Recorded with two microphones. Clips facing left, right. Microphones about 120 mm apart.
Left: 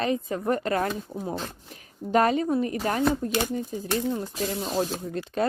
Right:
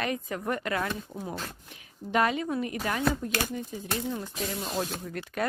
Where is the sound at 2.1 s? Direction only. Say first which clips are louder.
Left 5 dB; 40° left (ahead or behind).